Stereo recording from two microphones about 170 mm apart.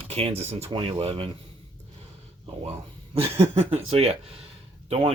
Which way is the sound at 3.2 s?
35° right (ahead or behind).